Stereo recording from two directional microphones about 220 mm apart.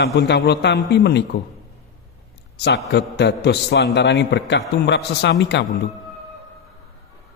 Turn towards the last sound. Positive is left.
turn(degrees=50)  # may be behind; listen again after turning